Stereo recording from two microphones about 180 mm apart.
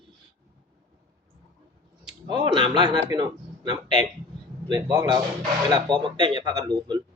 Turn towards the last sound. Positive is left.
turn(degrees=-25)  # may be behind; listen again after turning